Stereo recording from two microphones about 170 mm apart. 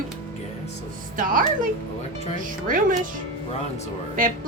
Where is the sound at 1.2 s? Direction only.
55° right (ahead or behind).